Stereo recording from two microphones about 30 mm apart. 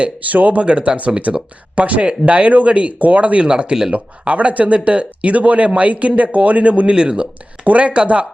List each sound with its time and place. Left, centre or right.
0.3 s speech: right
0.6 s speech: right
3.4 s speech: right
3.9 s speech: right
6.9 s speech: right
7.6 s speech: right